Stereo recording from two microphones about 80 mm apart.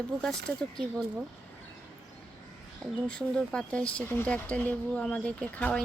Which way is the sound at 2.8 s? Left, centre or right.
Centre.